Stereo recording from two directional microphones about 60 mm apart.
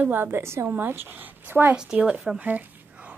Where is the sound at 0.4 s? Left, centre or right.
Right.